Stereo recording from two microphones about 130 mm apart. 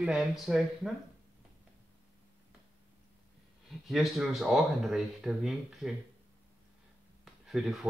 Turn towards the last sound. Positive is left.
turn(degrees=0)  # may be behind; listen again after turning